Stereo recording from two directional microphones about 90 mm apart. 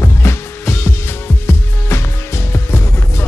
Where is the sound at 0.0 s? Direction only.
25° left (ahead or behind).